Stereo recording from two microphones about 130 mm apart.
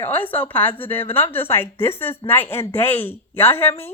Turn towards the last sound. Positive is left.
turn(degrees=15)  # may be behind; listen again after turning